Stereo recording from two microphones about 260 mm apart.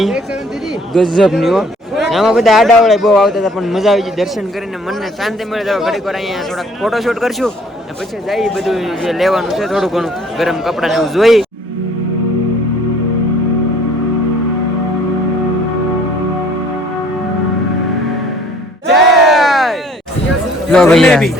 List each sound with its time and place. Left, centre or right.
0.9 s a man's voice: centre
19.1 s a sound: centre
20.7 s speech: centre